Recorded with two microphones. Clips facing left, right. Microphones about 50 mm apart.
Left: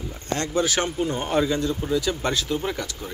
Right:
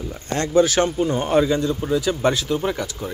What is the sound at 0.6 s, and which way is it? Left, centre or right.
Speech, centre.